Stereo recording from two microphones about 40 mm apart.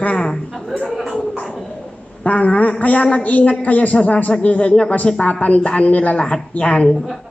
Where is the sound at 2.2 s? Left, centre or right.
Left.